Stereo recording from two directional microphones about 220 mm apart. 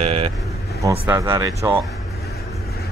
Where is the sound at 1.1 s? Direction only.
10° right (ahead or behind).